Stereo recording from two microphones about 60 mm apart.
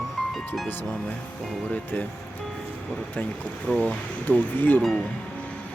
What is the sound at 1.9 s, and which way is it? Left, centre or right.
Speech, left.